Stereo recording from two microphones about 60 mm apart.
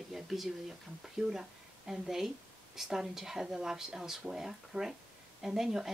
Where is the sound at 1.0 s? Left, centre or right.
Centre.